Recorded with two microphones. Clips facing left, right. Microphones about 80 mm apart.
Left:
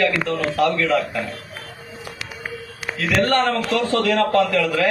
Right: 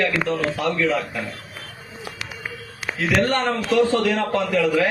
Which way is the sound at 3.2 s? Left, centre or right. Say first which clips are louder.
Left 2 dB; centre.